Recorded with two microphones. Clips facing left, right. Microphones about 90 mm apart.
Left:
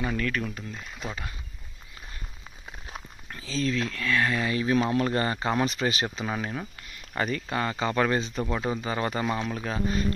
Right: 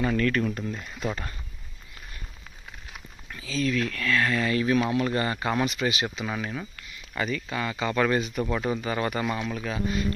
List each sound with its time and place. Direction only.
0.0 s speech: 10° left (ahead or behind)
2.9 s a sound: 35° left (ahead or behind)
3.8 s speech: 20° left (ahead or behind)
6.9 s speech: 40° left (ahead or behind)
8.5 s speech: 20° left (ahead or behind); by 10.0 s 35° left (ahead or behind)